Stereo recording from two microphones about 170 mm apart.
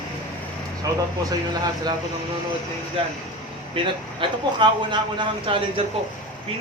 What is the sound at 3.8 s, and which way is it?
Speech, 30° right (ahead or behind).